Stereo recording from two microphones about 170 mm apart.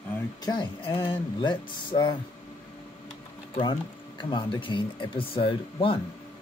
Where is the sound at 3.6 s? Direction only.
30° left (ahead or behind).